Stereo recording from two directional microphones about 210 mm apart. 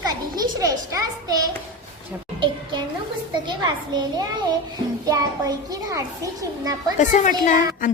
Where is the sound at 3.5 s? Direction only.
20° right (ahead or behind).